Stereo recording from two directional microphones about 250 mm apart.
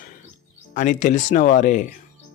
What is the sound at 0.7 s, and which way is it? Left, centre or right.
Speech, left.